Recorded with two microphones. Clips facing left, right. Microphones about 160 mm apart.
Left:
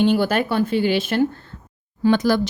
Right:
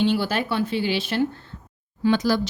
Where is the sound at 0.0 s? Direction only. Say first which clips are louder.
Left 4 dB; 50° left (ahead or behind).